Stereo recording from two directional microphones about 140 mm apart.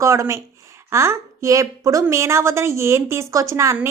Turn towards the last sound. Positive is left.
turn(degrees=-20)  # may be behind; listen again after turning